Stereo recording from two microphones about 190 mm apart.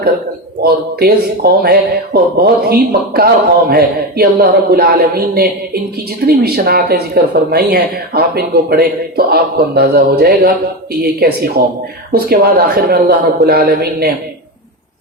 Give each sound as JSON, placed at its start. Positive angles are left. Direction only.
{"t": 0.6, "sound": "speech", "side_deg": -55}